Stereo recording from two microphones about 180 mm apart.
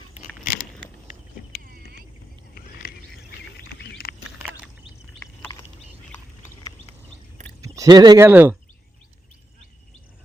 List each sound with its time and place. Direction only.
2.6 s a sound: 55° left (ahead or behind)
3.6 s patter: 65° left (ahead or behind)
7.6 s speech: 20° right (ahead or behind)
8.3 s speech: 10° right (ahead or behind)